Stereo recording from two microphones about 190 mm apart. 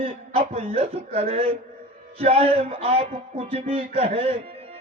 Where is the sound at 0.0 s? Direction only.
30° right (ahead or behind).